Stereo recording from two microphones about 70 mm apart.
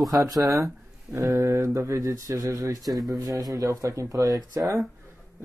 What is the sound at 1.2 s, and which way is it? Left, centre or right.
Speech, right.